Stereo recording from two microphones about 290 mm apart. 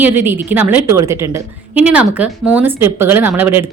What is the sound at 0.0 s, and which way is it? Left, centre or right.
A woman's voice, centre.